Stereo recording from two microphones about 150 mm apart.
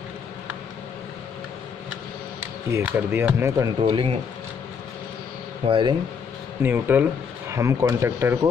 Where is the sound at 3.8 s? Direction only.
35° right (ahead or behind).